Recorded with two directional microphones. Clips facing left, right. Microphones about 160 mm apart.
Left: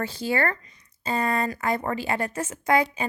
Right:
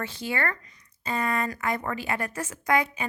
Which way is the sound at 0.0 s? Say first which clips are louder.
Left 4 dB; 35° left (ahead or behind).